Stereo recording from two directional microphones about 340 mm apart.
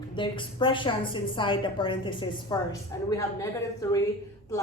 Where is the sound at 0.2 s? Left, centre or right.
Centre.